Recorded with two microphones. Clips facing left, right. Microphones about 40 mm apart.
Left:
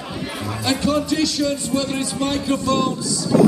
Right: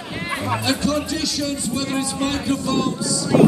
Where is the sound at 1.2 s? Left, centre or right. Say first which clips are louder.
Left 3 dB; centre.